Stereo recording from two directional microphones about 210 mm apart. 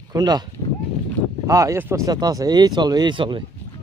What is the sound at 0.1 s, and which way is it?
Speech, 20° right (ahead or behind).